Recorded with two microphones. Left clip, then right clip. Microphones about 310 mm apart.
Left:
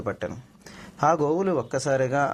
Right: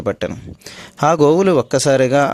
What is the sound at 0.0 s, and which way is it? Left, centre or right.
A man's voice, right.